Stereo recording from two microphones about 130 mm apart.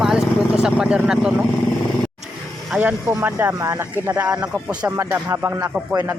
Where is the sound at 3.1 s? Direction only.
15° right (ahead or behind).